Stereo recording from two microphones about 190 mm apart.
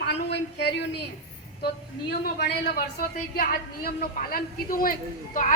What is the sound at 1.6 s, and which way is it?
A woman's voice, 55° left (ahead or behind).